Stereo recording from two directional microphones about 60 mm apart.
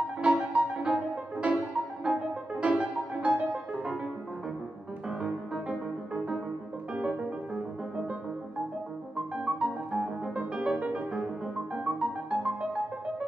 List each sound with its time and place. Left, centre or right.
0.2 s music: centre
5.2 s music: centre
9.1 s music: centre
9.9 s piano: centre
10.3 s music: centre